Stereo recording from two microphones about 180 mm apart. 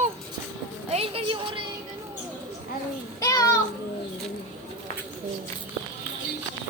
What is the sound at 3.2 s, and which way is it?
Child singing, 20° left (ahead or behind).